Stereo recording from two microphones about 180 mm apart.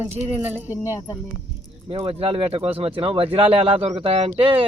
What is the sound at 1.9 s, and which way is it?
Speech, 30° right (ahead or behind).